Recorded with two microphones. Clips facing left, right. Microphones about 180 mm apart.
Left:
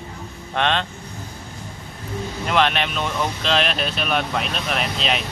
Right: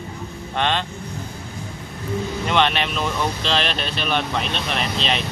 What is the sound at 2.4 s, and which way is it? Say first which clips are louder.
Speech: left 1 dB; centre (ahead or behind).